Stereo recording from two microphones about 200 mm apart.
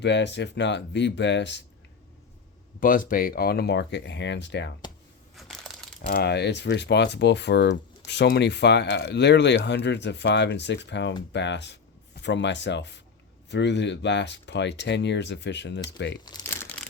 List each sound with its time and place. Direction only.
0.0 s speech: 60° left (ahead or behind)
2.8 s speech: 45° left (ahead or behind); by 4.7 s 60° left (ahead or behind)
5.3 s crushing: centre (ahead or behind)
6.1 s speech: 50° left (ahead or behind)
16.2 s crumpling: 15° left (ahead or behind)